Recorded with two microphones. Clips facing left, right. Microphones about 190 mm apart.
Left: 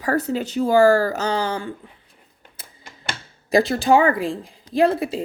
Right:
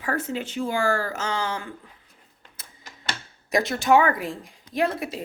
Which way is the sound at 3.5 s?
30° left (ahead or behind).